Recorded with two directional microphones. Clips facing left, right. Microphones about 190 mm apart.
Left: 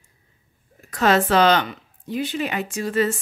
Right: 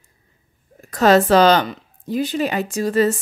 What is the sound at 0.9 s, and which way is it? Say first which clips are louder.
Speech: right 5 dB; 40° right (ahead or behind).